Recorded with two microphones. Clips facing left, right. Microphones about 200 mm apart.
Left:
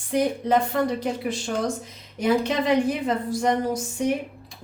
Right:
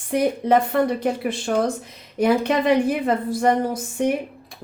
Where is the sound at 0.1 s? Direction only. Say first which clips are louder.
Right 3 dB; 60° right (ahead or behind).